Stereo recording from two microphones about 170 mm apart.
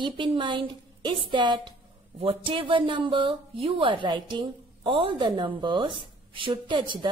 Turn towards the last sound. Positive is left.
turn(degrees=-25)  # may be behind; listen again after turning